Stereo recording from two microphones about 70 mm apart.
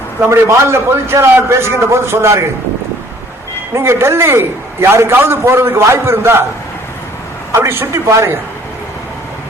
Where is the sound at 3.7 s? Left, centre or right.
Right.